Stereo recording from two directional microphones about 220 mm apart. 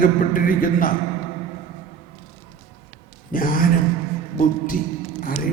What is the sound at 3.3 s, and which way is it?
A man's voice, 40° left (ahead or behind).